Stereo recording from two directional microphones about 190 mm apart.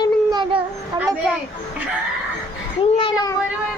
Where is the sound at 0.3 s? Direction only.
25° right (ahead or behind).